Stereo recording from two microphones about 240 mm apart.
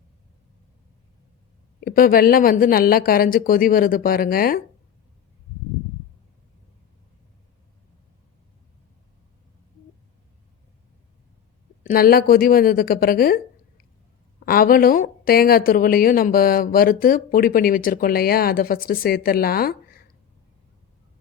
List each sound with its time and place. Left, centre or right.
1.8 s speech: left
11.8 s speech: left